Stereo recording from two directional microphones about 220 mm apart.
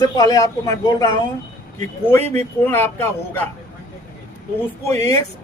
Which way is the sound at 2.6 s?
10° left (ahead or behind).